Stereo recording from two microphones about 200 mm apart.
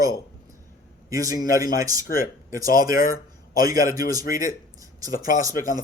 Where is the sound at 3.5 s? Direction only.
20° right (ahead or behind).